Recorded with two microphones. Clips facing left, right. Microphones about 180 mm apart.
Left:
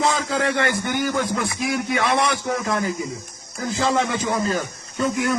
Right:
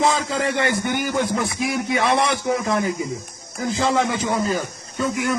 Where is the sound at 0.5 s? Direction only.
20° right (ahead or behind).